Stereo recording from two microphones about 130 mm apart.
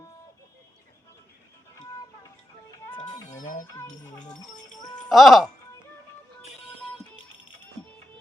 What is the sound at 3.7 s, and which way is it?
Music, 30° left (ahead or behind).